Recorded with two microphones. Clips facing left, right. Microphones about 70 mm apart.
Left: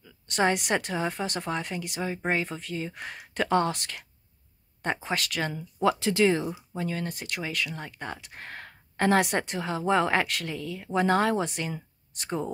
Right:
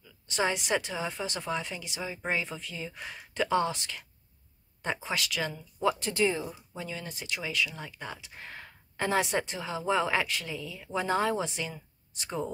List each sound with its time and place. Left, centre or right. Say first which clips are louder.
0.0 s speech: left 4 dB; left
6.8 s speech: left 6 dB; left